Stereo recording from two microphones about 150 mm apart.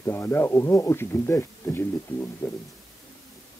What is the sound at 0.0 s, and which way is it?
A man's voice, 15° left (ahead or behind).